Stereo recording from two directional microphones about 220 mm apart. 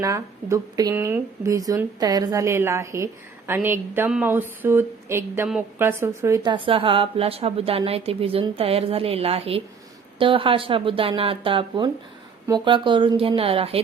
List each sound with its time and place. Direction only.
0.0 s a woman's voice: 15° right (ahead or behind)